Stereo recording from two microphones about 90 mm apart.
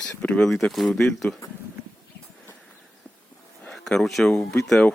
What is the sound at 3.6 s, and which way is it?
Speech, 5° left (ahead or behind).